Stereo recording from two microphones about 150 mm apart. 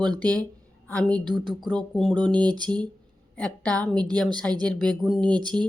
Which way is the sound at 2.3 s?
30° right (ahead or behind).